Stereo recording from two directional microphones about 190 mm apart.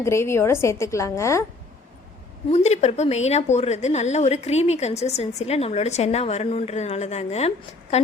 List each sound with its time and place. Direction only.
0.0 s a woman's voice: 15° left (ahead or behind)
2.5 s a woman's voice: 35° left (ahead or behind)